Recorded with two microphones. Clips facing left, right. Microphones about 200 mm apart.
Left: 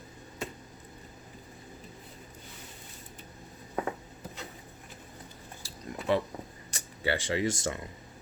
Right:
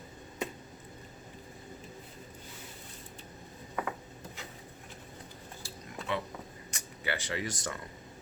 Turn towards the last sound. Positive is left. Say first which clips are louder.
# left 6 dB
turn(degrees=25)  # may be behind; listen again after turning